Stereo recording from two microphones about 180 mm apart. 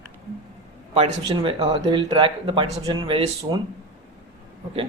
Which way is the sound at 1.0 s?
30° right (ahead or behind).